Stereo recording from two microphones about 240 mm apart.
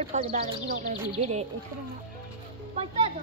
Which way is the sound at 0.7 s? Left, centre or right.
Right.